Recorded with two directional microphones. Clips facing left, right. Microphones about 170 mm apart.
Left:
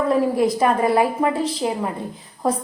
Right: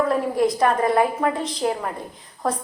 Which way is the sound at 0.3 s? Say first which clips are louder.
Left 1 dB; 5° left (ahead or behind).